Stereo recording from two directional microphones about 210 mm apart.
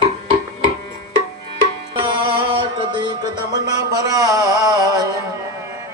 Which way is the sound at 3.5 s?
20° right (ahead or behind).